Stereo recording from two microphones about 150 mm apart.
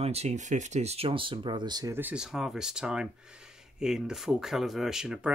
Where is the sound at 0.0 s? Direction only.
45° right (ahead or behind); by 2.0 s 25° right (ahead or behind).